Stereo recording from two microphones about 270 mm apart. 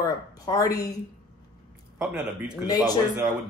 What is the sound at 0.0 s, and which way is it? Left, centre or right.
Speech, centre.